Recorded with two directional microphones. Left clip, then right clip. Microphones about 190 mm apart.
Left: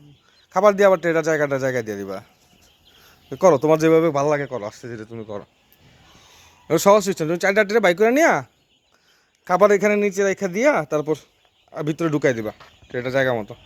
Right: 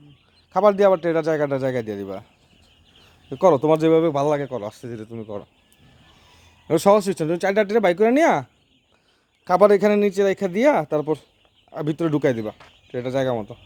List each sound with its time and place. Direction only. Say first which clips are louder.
0.5 s a man's voice: left 1 dB; 15° right (ahead or behind)
3.2 s a man's voice: left 1 dB; 15° right (ahead or behind)
6.7 s a man's voice: left 1 dB; 15° right (ahead or behind)